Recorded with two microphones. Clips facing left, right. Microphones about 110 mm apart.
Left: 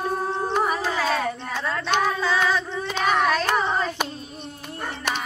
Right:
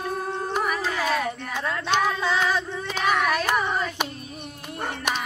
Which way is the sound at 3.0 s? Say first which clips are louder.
Left 2 dB; 30° left (ahead or behind).